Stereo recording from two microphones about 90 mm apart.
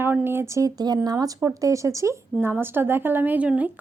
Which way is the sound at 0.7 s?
50° right (ahead or behind).